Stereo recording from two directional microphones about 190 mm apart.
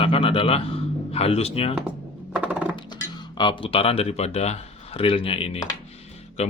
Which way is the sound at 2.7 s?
20° left (ahead or behind).